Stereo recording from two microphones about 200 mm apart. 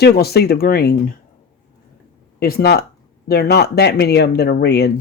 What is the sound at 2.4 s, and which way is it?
Speech, 50° left (ahead or behind).